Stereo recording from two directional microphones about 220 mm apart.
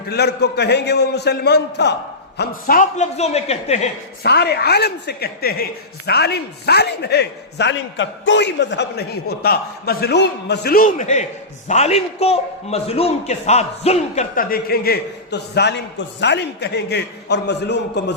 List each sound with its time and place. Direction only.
0.1 s a man's voice: 50° left (ahead or behind)
2.4 s a man's voice: 40° left (ahead or behind)
4.2 s a man's voice: 50° left (ahead or behind)